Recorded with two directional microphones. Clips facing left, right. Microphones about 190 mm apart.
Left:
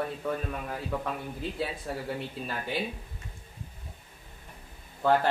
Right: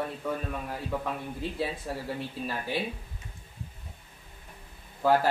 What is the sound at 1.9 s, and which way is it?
Speech, 5° right (ahead or behind).